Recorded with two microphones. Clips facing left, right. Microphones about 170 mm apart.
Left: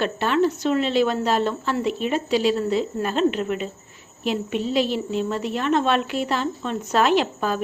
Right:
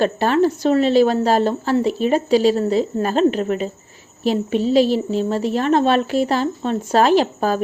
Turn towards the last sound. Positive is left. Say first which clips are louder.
# right 5 dB
turn(degrees=-40)  # may be behind; listen again after turning